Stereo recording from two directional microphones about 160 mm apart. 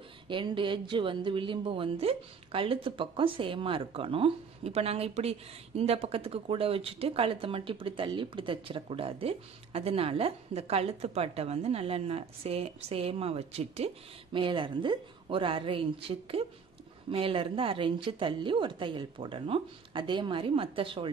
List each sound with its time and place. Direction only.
0.3 s speech: 30° right (ahead or behind)